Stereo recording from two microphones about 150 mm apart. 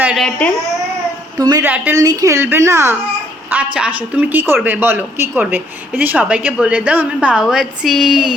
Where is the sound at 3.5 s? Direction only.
10° right (ahead or behind).